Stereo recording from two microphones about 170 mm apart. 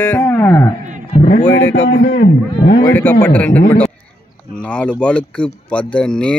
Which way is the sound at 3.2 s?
10° left (ahead or behind).